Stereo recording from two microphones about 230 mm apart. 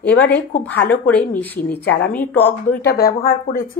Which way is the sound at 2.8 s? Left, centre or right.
Left.